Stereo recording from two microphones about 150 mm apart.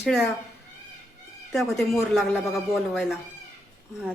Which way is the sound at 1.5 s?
Centre (ahead or behind).